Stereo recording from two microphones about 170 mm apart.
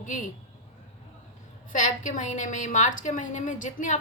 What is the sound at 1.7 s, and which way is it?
A woman's voice, 45° left (ahead or behind).